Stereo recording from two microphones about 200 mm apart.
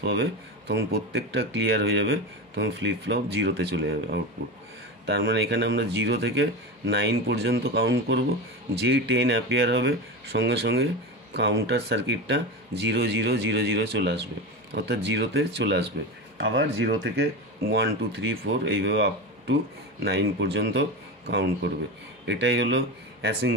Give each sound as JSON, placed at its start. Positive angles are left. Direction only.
{"t": 0.0, "sound": "speech", "side_deg": -55}